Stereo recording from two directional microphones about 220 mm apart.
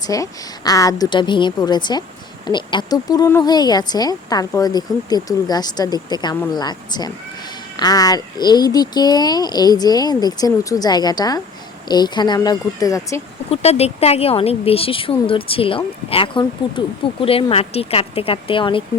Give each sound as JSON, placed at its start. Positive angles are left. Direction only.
{"t": 0.1, "sound": "speech", "side_deg": 15}
{"t": 13.5, "sound": "speech", "side_deg": 30}